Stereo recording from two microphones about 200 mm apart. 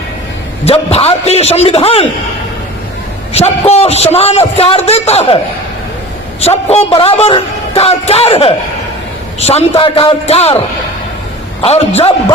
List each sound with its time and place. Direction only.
0.6 s a man's voice: 30° left (ahead or behind)
3.3 s a man's voice: 30° left (ahead or behind)
6.4 s a man's voice: 30° left (ahead or behind)
11.6 s a man's voice: 30° left (ahead or behind)